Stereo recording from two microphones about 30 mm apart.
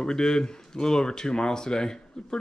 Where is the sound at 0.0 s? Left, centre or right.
Left.